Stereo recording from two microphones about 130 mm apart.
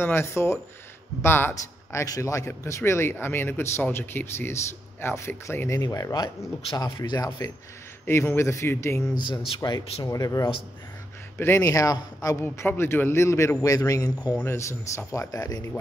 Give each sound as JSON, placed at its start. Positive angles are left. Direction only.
{"t": 0.0, "sound": "a man's voice", "side_deg": 20}
{"t": 9.1, "sound": "a man's voice", "side_deg": 35}